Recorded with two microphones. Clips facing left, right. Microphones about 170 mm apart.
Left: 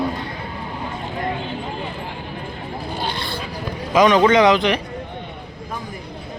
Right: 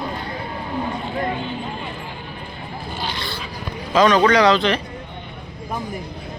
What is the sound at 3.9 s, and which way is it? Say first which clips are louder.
Speech: left 1 dB; 15° left (ahead or behind).